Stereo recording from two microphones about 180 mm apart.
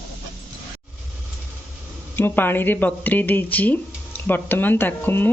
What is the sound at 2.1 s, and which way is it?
Speech, 10° left (ahead or behind).